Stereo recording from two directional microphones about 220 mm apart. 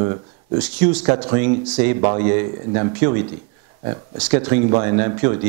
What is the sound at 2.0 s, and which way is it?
Speech, 25° right (ahead or behind).